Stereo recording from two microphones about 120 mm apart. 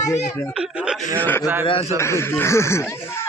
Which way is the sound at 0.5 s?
10° right (ahead or behind).